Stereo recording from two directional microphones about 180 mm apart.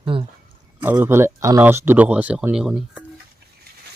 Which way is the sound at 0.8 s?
10° right (ahead or behind).